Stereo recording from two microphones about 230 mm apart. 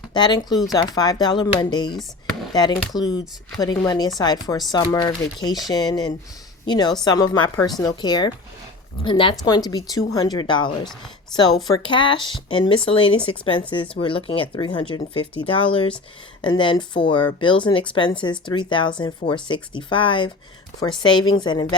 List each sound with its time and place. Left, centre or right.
0.1 s a woman's voice: centre